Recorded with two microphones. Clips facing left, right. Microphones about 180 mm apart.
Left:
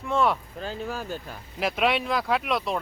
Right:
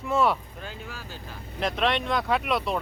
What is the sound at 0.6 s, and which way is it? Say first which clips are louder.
Speech: left 8 dB; 45° left (ahead or behind).